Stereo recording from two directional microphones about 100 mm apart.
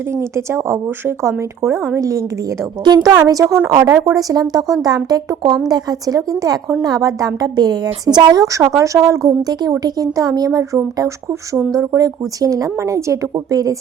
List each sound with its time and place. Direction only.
0.1 s a woman's voice: 25° right (ahead or behind)
2.8 s a woman's voice: 45° right (ahead or behind)